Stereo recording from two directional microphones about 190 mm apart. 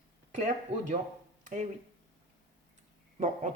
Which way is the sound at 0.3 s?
40° right (ahead or behind).